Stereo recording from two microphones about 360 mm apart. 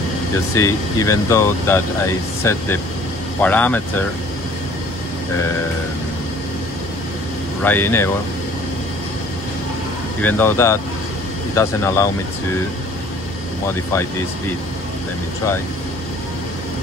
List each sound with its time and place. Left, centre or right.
0.6 s speech: centre
7.6 s speech: centre
10.2 s speech: centre